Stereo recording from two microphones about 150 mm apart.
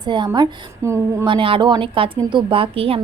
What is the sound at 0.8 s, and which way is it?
Speech, 20° right (ahead or behind).